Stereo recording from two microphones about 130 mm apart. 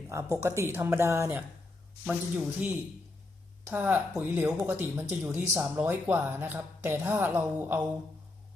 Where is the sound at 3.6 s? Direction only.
15° right (ahead or behind).